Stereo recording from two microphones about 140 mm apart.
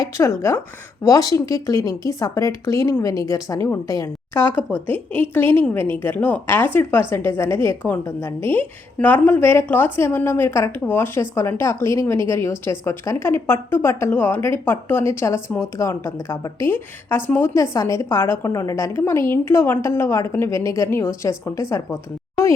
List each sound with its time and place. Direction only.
0.2 s a woman's voice: 20° left (ahead or behind)